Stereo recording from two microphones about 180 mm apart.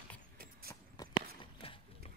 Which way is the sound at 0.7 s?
25° left (ahead or behind).